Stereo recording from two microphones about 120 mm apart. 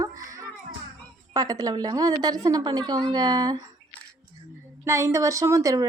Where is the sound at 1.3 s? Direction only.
30° right (ahead or behind).